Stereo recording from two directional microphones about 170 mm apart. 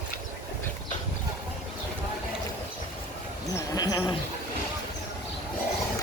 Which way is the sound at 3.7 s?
25° left (ahead or behind).